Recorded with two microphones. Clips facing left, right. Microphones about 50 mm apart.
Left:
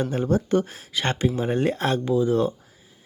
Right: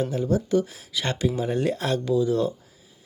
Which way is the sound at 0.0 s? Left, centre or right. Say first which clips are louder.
Left 1 dB; left.